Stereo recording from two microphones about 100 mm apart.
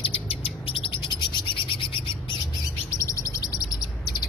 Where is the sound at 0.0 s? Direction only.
75° left (ahead or behind); by 1.9 s 60° left (ahead or behind).